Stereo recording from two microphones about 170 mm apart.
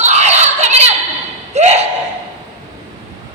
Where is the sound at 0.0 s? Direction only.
40° right (ahead or behind).